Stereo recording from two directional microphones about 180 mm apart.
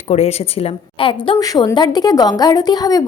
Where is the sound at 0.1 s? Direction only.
35° left (ahead or behind).